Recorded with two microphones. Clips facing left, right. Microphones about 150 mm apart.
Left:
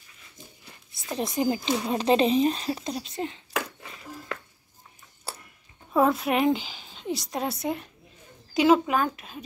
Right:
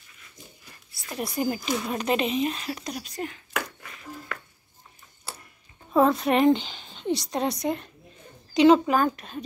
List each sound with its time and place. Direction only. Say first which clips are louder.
1.1 s speech: left 2 dB; 20° left (ahead or behind)
5.9 s a woman's voice: right 2 dB; 5° left (ahead or behind)